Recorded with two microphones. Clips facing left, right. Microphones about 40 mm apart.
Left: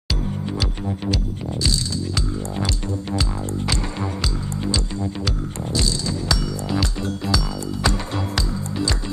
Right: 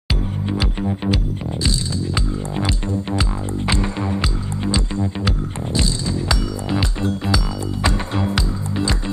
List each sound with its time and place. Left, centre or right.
0.1 s music: right